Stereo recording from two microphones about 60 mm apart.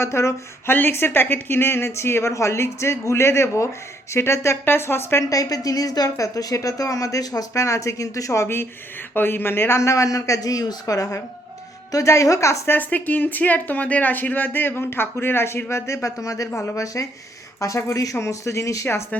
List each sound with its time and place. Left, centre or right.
0.0 s speech: left
0.7 s a woman's voice: left
4.6 s a woman's voice: left
5.3 s speech: left
9.1 s speech: left
12.0 s speech: left
12.6 s a woman's voice: left
15.7 s speech: left
17.6 s speech: left